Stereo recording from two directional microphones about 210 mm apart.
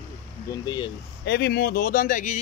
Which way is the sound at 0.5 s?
20° left (ahead or behind).